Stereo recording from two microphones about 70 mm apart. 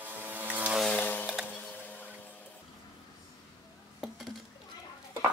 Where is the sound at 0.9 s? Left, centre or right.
Left.